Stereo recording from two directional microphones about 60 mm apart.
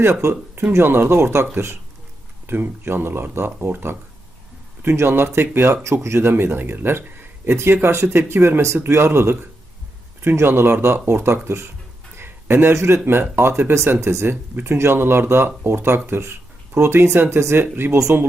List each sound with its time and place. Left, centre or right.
0.0 s speech: right
0.9 s speech: right
1.1 s speech: right
2.5 s speech: right
5.8 s speech: right
7.5 s speech: right
10.3 s speech: right
11.4 s speech: right
12.1 s a sound: right
13.3 s speech: right
16.8 s speech: right